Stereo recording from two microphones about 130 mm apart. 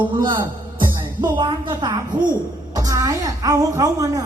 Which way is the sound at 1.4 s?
35° right (ahead or behind).